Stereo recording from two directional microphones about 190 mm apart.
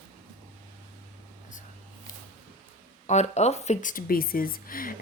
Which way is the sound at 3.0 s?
35° left (ahead or behind).